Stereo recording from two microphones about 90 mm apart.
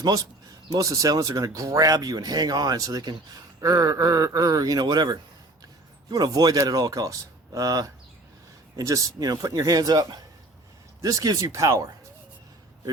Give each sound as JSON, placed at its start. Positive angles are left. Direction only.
{"t": 0.0, "sound": "speech", "side_deg": -40}